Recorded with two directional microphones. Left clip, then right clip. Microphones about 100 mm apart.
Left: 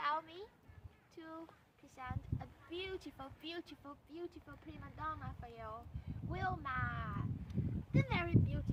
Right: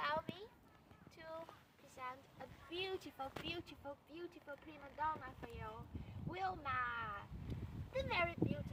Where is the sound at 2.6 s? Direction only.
25° left (ahead or behind).